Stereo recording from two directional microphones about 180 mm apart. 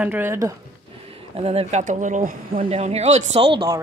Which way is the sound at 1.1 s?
35° right (ahead or behind).